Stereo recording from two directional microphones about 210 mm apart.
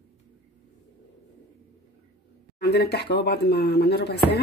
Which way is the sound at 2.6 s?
50° left (ahead or behind).